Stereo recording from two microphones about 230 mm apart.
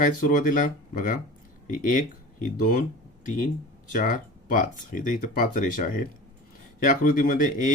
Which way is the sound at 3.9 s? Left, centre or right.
Left.